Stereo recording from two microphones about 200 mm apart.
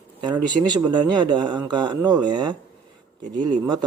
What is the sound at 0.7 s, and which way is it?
Speech, 20° right (ahead or behind).